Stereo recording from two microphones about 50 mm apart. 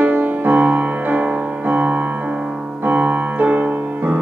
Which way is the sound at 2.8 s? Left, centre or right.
Right.